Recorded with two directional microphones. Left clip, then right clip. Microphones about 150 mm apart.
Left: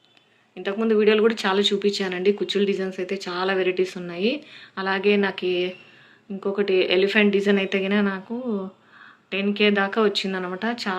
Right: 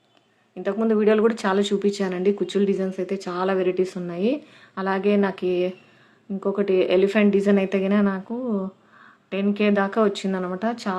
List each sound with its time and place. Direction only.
0.5 s a man's voice: 50° right (ahead or behind)
9.3 s speech: 55° right (ahead or behind)